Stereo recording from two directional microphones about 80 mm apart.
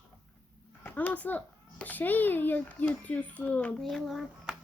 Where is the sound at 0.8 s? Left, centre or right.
Left.